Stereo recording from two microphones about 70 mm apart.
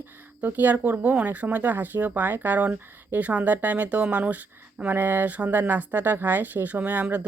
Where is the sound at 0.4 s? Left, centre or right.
Right.